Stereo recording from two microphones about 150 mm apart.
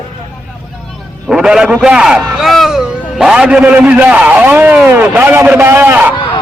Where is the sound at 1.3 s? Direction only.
5° right (ahead or behind).